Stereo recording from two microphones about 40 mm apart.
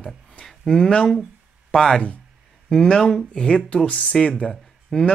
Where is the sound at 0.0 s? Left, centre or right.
Centre.